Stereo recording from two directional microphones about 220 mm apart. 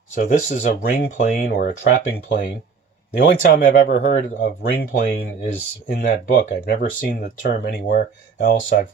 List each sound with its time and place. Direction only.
0.1 s speech: 35° left (ahead or behind)